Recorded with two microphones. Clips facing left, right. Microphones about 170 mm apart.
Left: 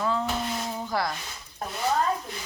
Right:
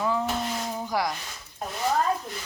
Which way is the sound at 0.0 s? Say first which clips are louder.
Right 1 dB; 15° right (ahead or behind).